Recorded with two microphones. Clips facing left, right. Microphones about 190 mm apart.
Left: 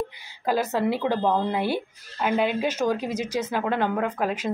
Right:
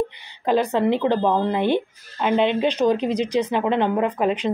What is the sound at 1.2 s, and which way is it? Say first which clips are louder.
Speech: right 3 dB; 60° right (ahead or behind).